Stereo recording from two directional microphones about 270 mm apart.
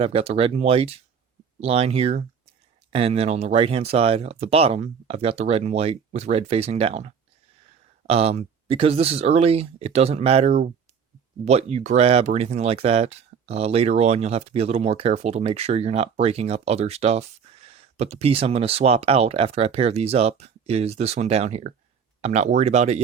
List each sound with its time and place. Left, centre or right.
0.0 s speech: right